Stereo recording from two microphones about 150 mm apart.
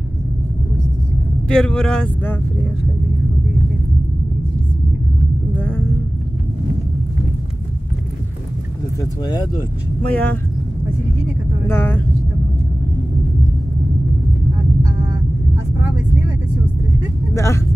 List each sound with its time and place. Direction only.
1.5 s speech: 5° left (ahead or behind)
5.5 s rumble: 10° left (ahead or behind)
9.0 s speech: 30° left (ahead or behind)
10.1 s speech: 10° left (ahead or behind)
11.6 s speech: 15° left (ahead or behind)
17.3 s speech: 20° left (ahead or behind)